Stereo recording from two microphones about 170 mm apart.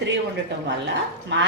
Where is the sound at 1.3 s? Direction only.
90° right.